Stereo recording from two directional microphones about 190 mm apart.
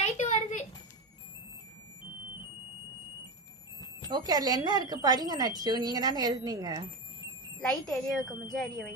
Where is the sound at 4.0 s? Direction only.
20° right (ahead or behind).